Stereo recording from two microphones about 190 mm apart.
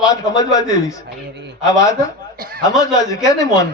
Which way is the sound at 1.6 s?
15° left (ahead or behind).